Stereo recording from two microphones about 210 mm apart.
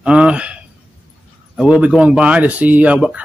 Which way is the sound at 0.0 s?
5° right (ahead or behind).